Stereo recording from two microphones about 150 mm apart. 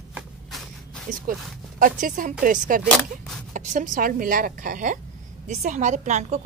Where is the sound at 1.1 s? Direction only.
65° right (ahead or behind).